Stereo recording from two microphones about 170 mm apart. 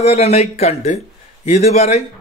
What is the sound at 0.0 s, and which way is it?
A man's voice, 40° left (ahead or behind).